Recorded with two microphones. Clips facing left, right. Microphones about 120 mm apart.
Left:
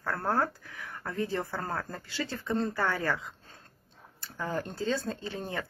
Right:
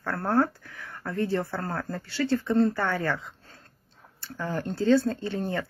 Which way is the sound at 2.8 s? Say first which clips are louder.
Right 2 dB; 25° right (ahead or behind).